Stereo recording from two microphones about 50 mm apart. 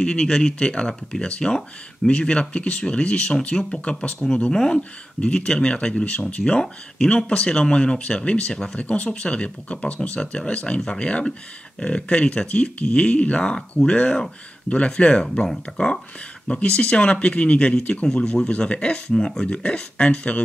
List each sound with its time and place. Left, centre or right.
0.0 s speech: left
16.4 s speech: left